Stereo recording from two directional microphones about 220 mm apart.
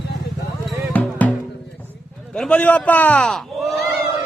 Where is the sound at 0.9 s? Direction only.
5° left (ahead or behind).